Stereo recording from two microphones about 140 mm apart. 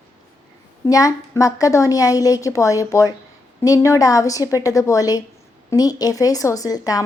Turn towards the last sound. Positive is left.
turn(degrees=25)  # may be behind; listen again after turning